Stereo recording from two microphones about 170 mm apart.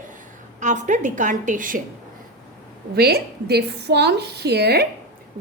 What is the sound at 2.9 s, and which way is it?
A woman's voice, 70° right (ahead or behind).